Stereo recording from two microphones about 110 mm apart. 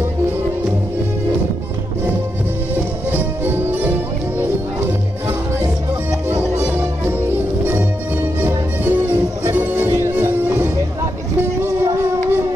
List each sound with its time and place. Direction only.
3.1 s music: 15° right (ahead or behind)
6.6 s music: 15° right (ahead or behind)
8.4 s music: 20° right (ahead or behind)